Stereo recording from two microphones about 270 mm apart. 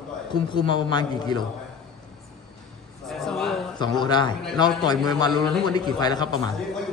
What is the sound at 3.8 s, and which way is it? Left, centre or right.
A man's voice, centre.